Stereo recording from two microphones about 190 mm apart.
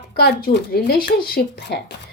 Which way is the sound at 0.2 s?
60° left (ahead or behind).